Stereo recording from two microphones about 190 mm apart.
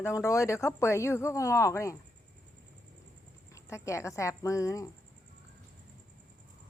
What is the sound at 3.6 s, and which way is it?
Speech, 15° left (ahead or behind).